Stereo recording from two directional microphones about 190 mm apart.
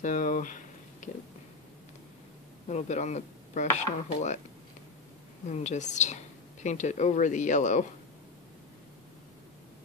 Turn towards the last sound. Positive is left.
turn(degrees=40)  # may be behind; listen again after turning